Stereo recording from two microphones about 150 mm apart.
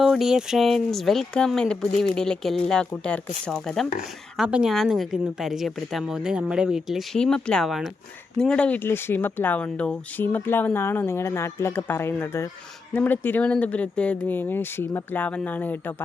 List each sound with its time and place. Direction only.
0.0 s speech: centre (ahead or behind)